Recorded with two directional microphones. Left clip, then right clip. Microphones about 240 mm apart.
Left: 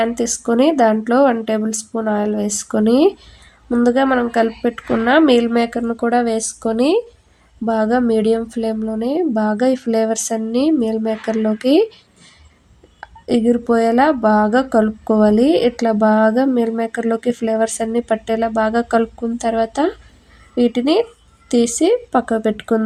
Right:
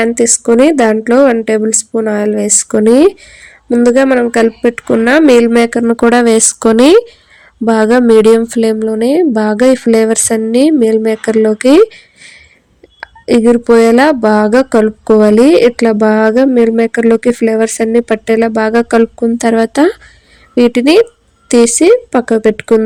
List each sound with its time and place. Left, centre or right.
0.0 s speech: right